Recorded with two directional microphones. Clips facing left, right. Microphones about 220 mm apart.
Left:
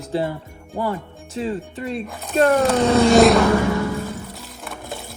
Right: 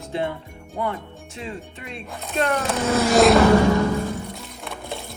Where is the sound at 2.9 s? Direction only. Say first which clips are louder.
Left 4 dB; 30° left (ahead or behind).